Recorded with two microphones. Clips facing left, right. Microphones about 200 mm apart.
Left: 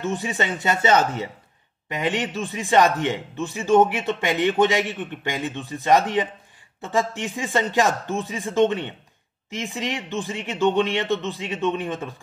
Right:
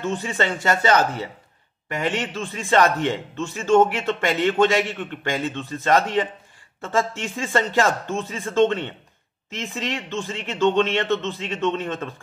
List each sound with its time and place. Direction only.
0.0 s a man's voice: 20° left (ahead or behind)